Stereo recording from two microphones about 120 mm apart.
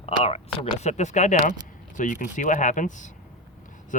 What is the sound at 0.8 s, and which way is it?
Speech, 75° left (ahead or behind).